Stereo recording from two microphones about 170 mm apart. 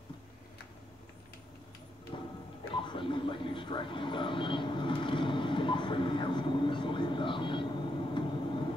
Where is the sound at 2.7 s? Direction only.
30° left (ahead or behind).